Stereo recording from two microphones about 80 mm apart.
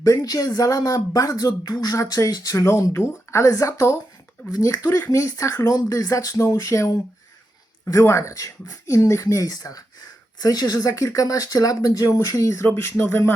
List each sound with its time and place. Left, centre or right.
0.0 s speech: left